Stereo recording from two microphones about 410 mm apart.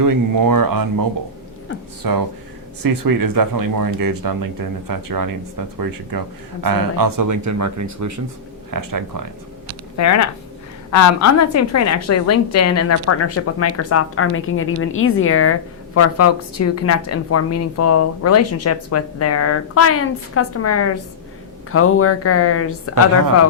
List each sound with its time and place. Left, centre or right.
0.0 s speech: right
2.0 s speech: right
10.0 s a woman's voice: left